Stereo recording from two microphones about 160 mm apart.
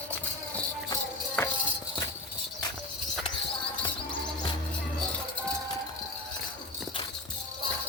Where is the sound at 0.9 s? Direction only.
15° left (ahead or behind).